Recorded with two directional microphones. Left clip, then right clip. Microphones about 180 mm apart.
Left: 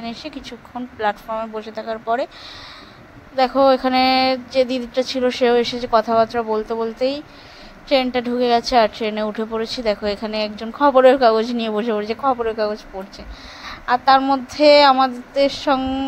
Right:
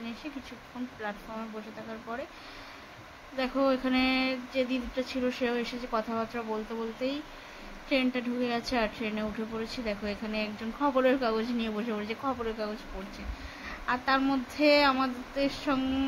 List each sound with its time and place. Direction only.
0.0 s a woman's voice: 45° left (ahead or behind)
3.3 s a woman's voice: 45° left (ahead or behind)